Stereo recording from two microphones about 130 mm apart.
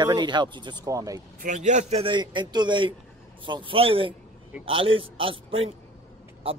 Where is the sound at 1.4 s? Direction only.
70° right (ahead or behind).